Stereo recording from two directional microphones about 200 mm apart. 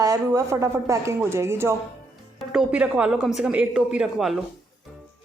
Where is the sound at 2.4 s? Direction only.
5° right (ahead or behind).